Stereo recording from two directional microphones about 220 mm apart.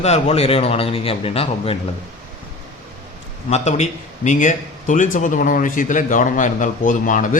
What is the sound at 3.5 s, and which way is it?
A man's voice, 30° left (ahead or behind).